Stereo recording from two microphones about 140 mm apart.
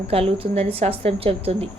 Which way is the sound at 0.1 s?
45° right (ahead or behind).